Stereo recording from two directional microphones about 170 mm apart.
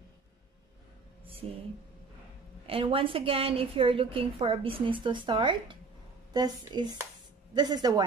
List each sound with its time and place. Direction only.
2.6 s a woman's voice: 35° right (ahead or behind)